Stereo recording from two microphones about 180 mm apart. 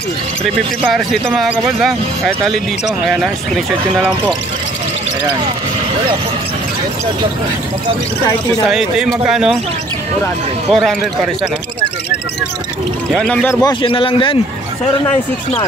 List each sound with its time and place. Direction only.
0.9 s speech: centre (ahead or behind)
8.6 s speech: 5° right (ahead or behind)
10.7 s speech: centre (ahead or behind)
13.1 s speech: 5° left (ahead or behind)
13.6 s a man's voice: 25° left (ahead or behind)